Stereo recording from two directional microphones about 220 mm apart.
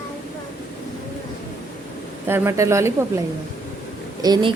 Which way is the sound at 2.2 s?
10° right (ahead or behind).